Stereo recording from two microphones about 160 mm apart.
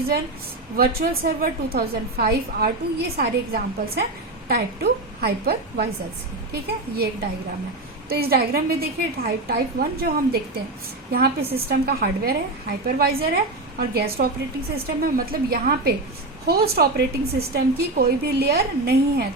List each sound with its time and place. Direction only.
0.8 s a woman's voice: 70° right (ahead or behind)
8.1 s a woman's voice: 70° right (ahead or behind); by 19.2 s 90° right